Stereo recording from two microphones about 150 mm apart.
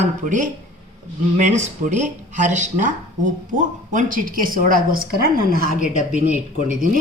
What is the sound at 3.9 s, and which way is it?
A woman's voice, 65° right (ahead or behind).